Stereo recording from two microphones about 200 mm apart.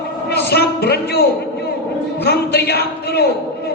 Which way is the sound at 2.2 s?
55° left (ahead or behind).